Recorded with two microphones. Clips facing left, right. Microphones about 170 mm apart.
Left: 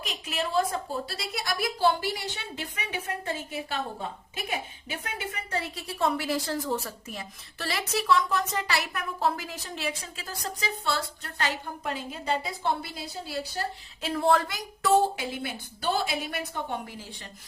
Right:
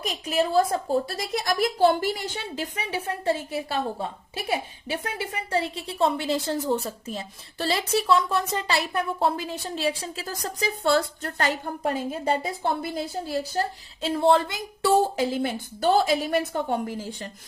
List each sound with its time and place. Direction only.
0.1 s a woman's voice: 40° right (ahead or behind)
14.0 s a woman's voice: 25° right (ahead or behind)
15.4 s a woman's voice: 45° right (ahead or behind)